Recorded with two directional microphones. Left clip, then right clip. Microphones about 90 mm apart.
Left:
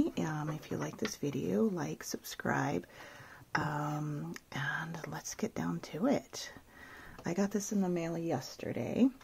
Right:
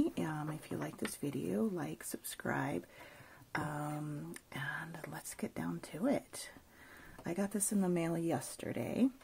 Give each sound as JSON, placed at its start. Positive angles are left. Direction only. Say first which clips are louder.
{"t": 0.0, "sound": "a sound", "louder": "left 2 dB", "side_deg": 15}
{"t": 1.2, "sound": "speech", "louder": "left 5 dB", "side_deg": 20}
{"t": 5.0, "sound": "speech", "louder": "left 5 dB", "side_deg": 20}
{"t": 7.5, "sound": "speech", "louder": "left 1 dB", "side_deg": -5}